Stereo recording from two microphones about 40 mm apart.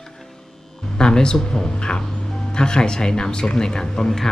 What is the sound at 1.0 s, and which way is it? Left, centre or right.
Speech, left.